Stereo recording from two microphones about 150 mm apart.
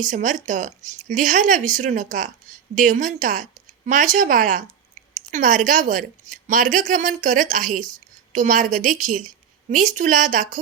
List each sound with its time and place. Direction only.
0.0 s a woman's voice: 60° right (ahead or behind)